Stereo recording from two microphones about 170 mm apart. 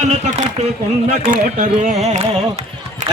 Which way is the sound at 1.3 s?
45° right (ahead or behind).